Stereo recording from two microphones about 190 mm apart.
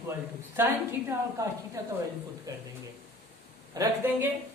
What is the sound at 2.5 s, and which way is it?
Speech, 20° right (ahead or behind).